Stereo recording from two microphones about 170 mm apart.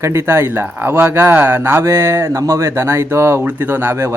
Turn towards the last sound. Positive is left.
turn(degrees=-15)  # may be behind; listen again after turning